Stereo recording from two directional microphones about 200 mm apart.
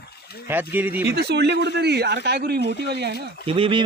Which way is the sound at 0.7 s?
10° right (ahead or behind).